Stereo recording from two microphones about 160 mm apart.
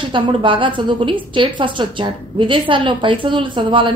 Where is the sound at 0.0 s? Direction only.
30° right (ahead or behind).